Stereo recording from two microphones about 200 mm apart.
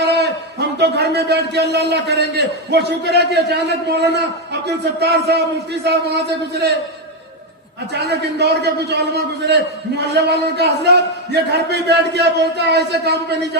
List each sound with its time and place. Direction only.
0.8 s a man's voice: 55° right (ahead or behind)
8.4 s a man's voice: 60° right (ahead or behind)